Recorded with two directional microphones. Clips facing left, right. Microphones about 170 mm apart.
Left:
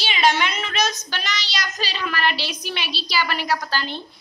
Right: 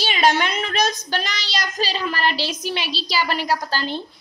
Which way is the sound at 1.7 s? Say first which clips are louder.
Right 3 dB; 35° right (ahead or behind).